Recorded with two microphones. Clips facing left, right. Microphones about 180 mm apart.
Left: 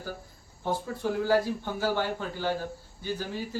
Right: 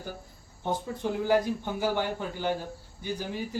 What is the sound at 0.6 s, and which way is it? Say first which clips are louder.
A man's voice: left 1 dB; 20° right (ahead or behind).